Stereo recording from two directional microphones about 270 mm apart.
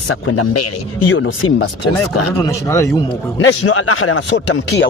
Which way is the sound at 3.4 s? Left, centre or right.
Left.